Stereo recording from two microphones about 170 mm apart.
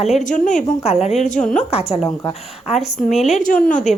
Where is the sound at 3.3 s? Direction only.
50° left (ahead or behind).